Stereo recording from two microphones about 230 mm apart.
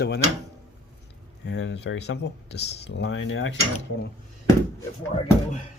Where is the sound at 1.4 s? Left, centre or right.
Left.